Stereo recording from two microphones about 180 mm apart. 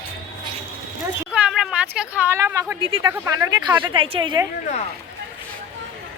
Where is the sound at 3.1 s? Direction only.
15° right (ahead or behind).